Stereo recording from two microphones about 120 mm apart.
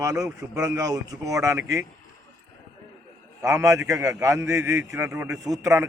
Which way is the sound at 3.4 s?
25° right (ahead or behind).